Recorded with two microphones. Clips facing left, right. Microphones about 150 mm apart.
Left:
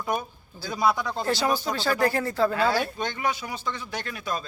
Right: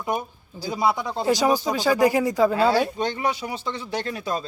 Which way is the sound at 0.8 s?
25° right (ahead or behind).